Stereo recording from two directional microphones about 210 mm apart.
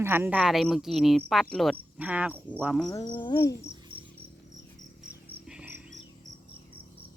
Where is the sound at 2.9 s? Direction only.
20° left (ahead or behind).